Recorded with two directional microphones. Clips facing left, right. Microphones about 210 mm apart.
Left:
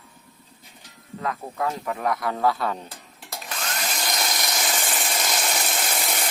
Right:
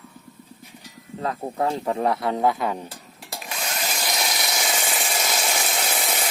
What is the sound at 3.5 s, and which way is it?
Drill, 5° right (ahead or behind).